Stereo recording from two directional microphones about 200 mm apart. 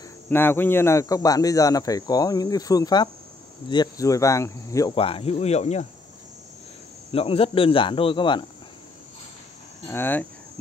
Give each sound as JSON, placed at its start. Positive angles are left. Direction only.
{"t": 0.3, "sound": "speech", "side_deg": 10}
{"t": 4.9, "sound": "speech", "side_deg": 30}
{"t": 7.1, "sound": "speech", "side_deg": 30}
{"t": 9.8, "sound": "speech", "side_deg": 10}